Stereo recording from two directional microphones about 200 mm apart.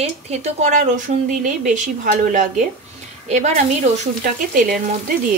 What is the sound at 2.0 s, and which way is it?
A woman's voice, 40° right (ahead or behind).